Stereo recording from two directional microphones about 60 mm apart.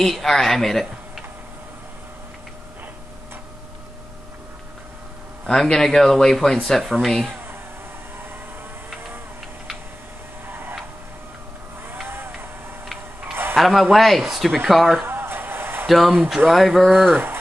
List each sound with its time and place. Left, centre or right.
0.0 s speech: centre
5.5 s speech: centre
6.8 s speech: centre
10.5 s tick-tock: right
12.1 s vehicle: right
13.2 s tick-tock: right
13.6 s speech: centre
15.0 s a sound: right
15.9 s speech: centre
16.9 s speech: right